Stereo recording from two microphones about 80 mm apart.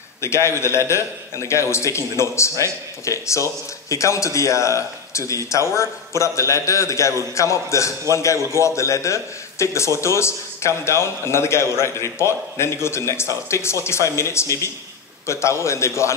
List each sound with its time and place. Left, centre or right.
0.2 s a man's voice: left